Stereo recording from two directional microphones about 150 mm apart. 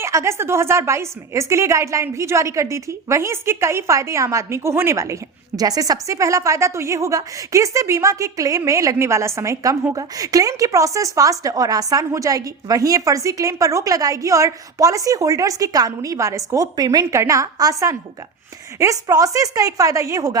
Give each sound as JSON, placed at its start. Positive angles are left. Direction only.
{"t": 0.0, "sound": "a woman's voice", "side_deg": -20}